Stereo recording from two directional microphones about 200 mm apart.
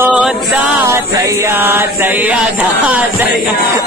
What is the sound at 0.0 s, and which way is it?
Chant, 5° right (ahead or behind).